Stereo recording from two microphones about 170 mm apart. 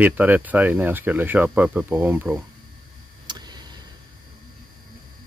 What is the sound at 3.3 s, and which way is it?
Vehicle, 25° right (ahead or behind).